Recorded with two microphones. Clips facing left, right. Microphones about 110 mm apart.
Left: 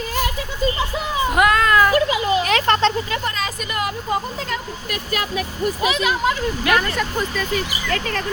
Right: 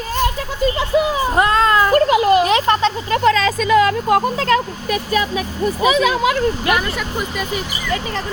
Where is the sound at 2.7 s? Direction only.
15° right (ahead or behind).